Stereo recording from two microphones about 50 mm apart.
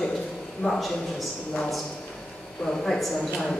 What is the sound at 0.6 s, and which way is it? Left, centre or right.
Speech, left.